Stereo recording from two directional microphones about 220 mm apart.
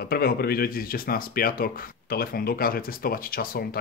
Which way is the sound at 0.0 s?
45° left (ahead or behind).